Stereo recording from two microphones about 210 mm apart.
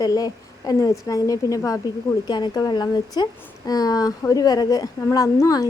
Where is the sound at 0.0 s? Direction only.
15° left (ahead or behind).